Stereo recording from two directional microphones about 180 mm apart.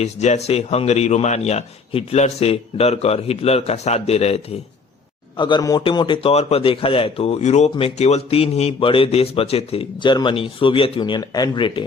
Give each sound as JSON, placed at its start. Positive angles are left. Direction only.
{"t": 0.0, "sound": "a man's voice", "side_deg": 40}
{"t": 5.4, "sound": "a man's voice", "side_deg": 25}